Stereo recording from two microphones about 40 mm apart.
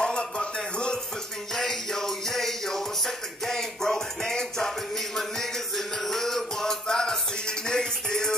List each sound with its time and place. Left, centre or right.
0.0 s music: centre
1.5 s music: centre